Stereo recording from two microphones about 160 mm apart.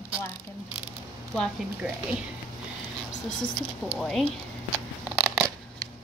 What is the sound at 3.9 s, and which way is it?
Speech, centre (ahead or behind).